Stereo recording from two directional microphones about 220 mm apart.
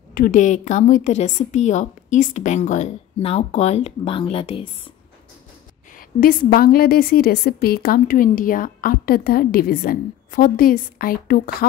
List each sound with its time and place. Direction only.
0.1 s a woman's voice: 40° left (ahead or behind)
5.9 s a woman's voice: 40° left (ahead or behind)